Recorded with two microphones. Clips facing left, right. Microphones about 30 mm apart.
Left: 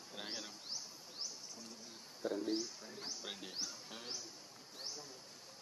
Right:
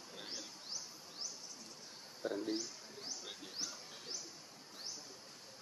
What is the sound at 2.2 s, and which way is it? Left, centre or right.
Speech, centre.